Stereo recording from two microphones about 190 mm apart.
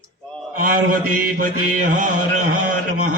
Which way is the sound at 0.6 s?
45° right (ahead or behind).